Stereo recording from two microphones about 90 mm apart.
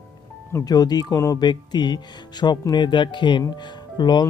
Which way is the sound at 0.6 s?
45° left (ahead or behind).